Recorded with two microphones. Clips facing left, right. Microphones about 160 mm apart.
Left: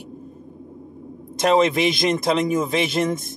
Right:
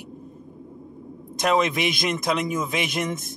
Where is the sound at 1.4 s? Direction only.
30° left (ahead or behind).